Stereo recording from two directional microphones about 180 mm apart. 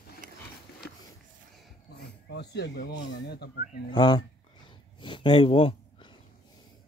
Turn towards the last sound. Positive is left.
turn(degrees=30)  # may be behind; listen again after turning